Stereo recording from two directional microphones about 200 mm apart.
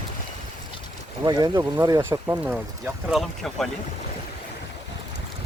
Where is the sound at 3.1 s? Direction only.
Centre (ahead or behind).